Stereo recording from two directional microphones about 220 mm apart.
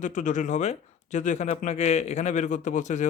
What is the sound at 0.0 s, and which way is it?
A man's voice, 35° left (ahead or behind).